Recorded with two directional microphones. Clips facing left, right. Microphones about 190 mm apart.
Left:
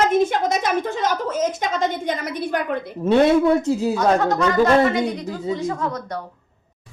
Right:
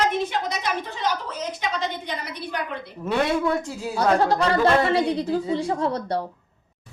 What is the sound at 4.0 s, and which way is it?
A woman's voice, 30° right (ahead or behind).